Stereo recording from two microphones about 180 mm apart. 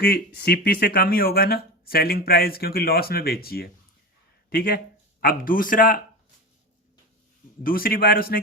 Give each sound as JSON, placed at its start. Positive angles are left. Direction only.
{"t": 0.0, "sound": "speech", "side_deg": 60}
{"t": 7.6, "sound": "speech", "side_deg": 55}